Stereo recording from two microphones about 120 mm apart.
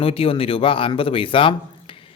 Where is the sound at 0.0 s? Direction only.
50° left (ahead or behind).